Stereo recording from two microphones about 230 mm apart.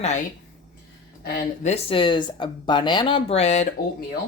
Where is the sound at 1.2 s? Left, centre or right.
Left.